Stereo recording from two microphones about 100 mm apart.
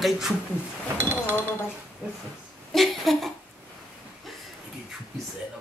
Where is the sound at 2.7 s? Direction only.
Centre (ahead or behind).